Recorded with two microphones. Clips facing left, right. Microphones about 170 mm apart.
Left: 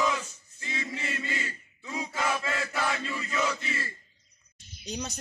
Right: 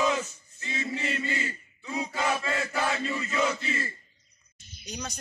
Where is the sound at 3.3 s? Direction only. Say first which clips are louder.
Right 1 dB; 15° right (ahead or behind).